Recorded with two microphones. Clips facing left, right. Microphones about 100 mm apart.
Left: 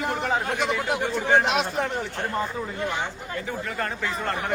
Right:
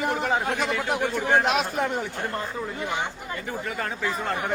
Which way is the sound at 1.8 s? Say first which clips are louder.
Right 2 dB; 15° right (ahead or behind).